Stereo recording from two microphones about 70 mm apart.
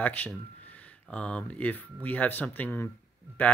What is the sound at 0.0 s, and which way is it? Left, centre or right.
Speech, left.